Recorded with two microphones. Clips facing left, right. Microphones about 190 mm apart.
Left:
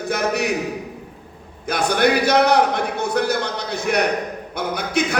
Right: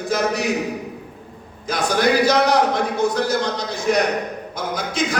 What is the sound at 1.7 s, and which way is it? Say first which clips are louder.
A man's voice: left 1 dB; 60° left (ahead or behind).